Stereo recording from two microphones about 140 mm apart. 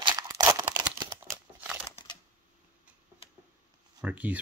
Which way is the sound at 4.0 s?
10° right (ahead or behind).